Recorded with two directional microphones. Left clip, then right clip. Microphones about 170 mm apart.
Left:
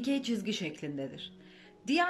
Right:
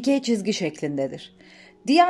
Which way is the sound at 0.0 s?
35° right (ahead or behind).